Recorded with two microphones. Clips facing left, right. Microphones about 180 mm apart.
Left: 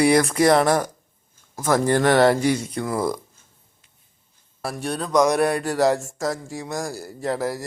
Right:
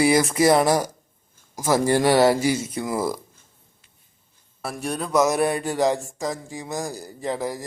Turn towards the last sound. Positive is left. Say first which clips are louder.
# left 2 dB
turn(degrees=0)  # may be behind; listen again after turning